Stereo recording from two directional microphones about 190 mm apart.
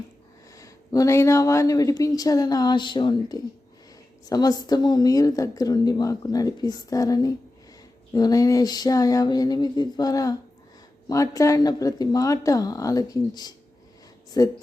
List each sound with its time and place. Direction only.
0.5 s a woman's voice: 15° left (ahead or behind)